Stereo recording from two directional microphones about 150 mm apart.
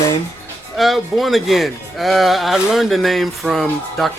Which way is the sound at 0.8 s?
Centre (ahead or behind).